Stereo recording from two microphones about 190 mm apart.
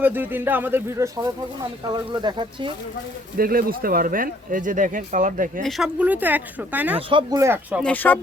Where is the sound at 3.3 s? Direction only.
50° right (ahead or behind).